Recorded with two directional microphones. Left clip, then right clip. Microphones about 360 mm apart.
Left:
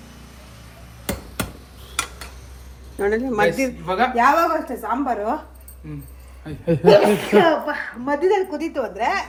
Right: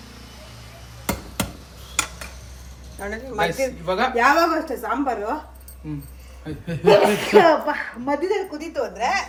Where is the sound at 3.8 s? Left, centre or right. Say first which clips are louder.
Left 2 dB; centre.